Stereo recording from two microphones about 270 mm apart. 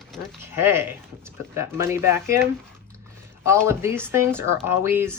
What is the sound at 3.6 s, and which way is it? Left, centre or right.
Speech, centre.